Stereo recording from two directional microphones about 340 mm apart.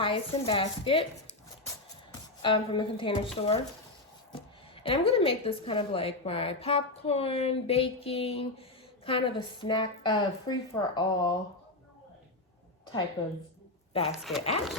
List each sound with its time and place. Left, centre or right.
0.0 s a woman's voice: centre
2.4 s a woman's voice: centre
4.8 s a woman's voice: centre
13.2 s a woman's voice: centre
14.1 s speech: centre